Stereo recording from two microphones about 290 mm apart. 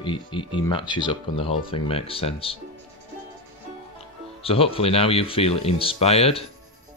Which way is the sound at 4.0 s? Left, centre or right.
Centre.